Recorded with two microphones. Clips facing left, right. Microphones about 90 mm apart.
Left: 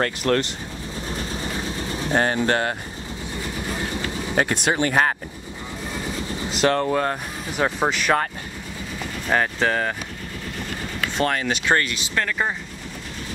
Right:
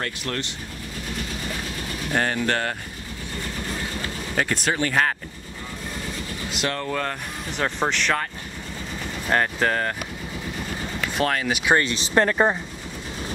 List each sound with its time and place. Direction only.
0.0 s speech: 55° left (ahead or behind)
1.0 s vehicle: 30° left (ahead or behind)
3.4 s train: 15° left (ahead or behind)
4.4 s speech: 20° left (ahead or behind)
6.5 s speech: 40° left (ahead or behind)
6.9 s speech: 20° left (ahead or behind)
7.5 s speech: 10° left (ahead or behind)
9.3 s speech: centre (ahead or behind)
10.8 s vehicle: centre (ahead or behind)
11.8 s speech: 30° right (ahead or behind)